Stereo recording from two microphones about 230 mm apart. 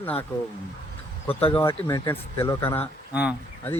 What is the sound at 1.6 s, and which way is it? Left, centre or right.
Speech, centre.